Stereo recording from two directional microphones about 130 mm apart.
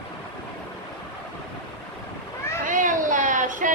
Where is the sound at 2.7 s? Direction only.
85° right.